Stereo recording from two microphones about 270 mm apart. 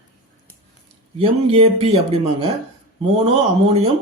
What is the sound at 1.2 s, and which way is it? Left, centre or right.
Speech, right.